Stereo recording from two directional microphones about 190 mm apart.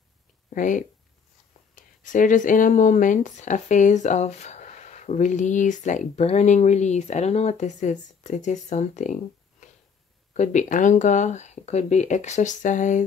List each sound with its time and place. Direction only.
0.5 s speech: 45° left (ahead or behind)